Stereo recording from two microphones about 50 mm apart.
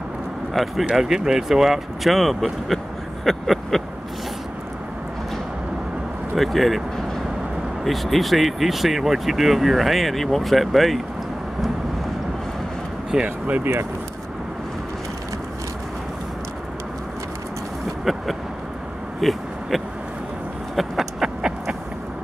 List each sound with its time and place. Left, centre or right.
0.5 s speech: centre
6.3 s speech: centre
7.8 s speech: centre
13.1 s speech: right
19.2 s speech: centre
20.7 s a sound: centre
21.4 s a sound: centre